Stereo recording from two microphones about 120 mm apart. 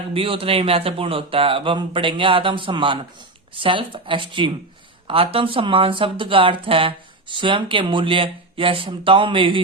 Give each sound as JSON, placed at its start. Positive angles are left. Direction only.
{"t": 0.1, "sound": "speech", "side_deg": -50}